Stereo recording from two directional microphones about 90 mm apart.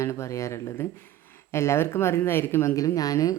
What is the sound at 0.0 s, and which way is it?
Speech, 35° left (ahead or behind).